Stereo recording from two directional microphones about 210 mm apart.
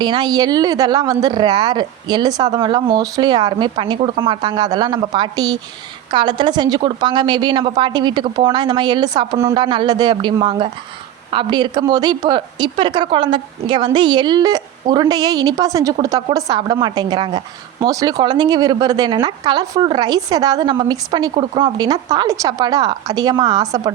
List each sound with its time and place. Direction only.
0.0 s a woman's voice: 20° right (ahead or behind)